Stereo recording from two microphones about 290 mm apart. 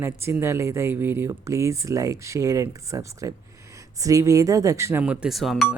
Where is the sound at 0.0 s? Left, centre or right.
Centre.